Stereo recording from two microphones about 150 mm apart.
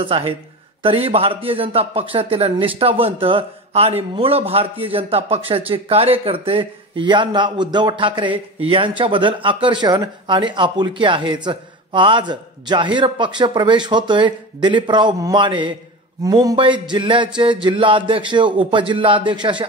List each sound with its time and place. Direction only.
0.0 s speech: 35° right (ahead or behind)